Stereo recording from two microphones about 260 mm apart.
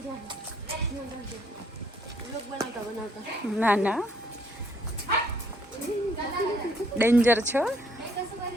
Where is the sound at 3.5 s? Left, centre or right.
Centre.